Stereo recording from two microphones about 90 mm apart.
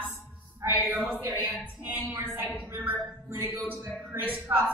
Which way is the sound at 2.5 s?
15° right (ahead or behind).